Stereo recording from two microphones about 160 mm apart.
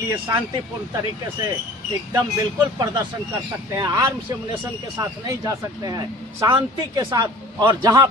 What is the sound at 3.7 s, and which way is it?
Speech, 20° right (ahead or behind).